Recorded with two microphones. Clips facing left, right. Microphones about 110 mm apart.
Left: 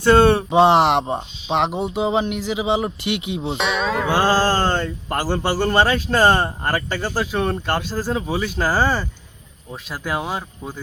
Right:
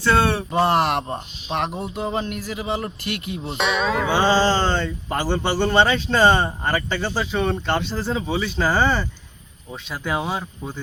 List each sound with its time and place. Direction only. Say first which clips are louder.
0.6 s speech: left 5 dB; 85° left
1.0 s a man's voice: left 5 dB; 15° left (ahead or behind)
2.3 s a man's voice: left 6 dB; 90° left
2.8 s a man's voice: left 5 dB; 15° left (ahead or behind)
3.6 s a man's voice: right 2 dB; centre (ahead or behind)